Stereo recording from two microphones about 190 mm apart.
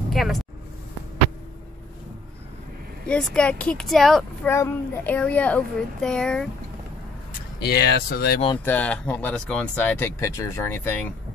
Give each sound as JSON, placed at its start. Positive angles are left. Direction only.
{"t": 0.1, "sound": "speech", "side_deg": 0}
{"t": 3.1, "sound": "speech", "side_deg": 5}
{"t": 4.5, "sound": "speech", "side_deg": 15}
{"t": 7.6, "sound": "speech", "side_deg": 55}
{"t": 8.6, "sound": "speech", "side_deg": 5}